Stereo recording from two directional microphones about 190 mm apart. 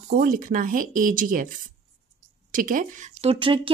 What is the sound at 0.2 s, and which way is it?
Speech, 45° right (ahead or behind).